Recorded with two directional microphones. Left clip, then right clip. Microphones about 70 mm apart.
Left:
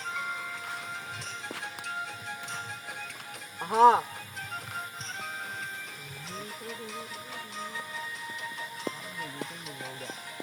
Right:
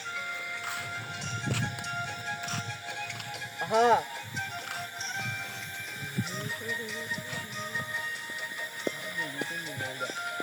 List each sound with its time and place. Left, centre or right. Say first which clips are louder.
3.7 s speech: left 4 dB; right